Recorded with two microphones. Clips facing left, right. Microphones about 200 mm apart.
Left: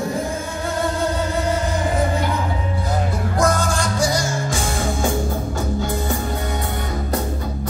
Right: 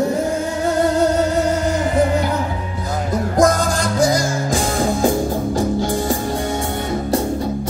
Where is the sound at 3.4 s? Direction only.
40° right (ahead or behind).